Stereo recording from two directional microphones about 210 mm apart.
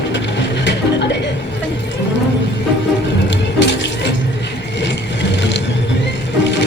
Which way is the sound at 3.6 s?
60° left (ahead or behind).